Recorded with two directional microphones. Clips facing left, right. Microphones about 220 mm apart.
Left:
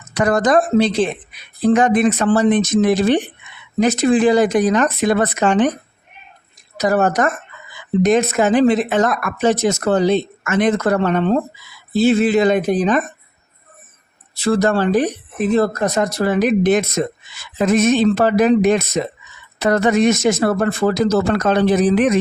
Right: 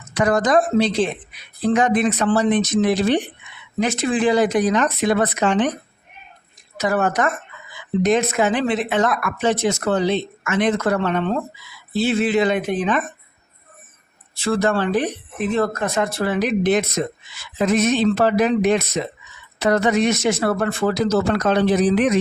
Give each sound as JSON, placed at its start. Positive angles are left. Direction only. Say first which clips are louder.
{"t": 0.1, "sound": "speech", "louder": "left 2 dB", "side_deg": 45}
{"t": 6.7, "sound": "speech", "louder": "left 4 dB", "side_deg": 40}
{"t": 14.3, "sound": "speech", "louder": "left 3 dB", "side_deg": 40}